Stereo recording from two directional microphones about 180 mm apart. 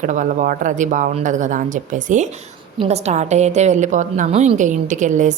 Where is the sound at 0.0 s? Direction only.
45° right (ahead or behind).